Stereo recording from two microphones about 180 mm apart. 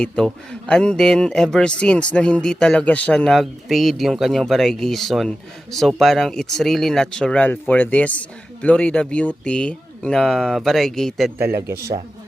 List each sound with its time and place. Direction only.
0.0 s speech: 5° left (ahead or behind)
11.3 s speech: 15° right (ahead or behind)